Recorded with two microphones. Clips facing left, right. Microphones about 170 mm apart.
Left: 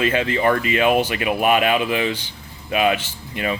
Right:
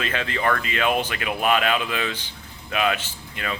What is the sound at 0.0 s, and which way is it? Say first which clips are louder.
Speech: left 6 dB; 15° left (ahead or behind).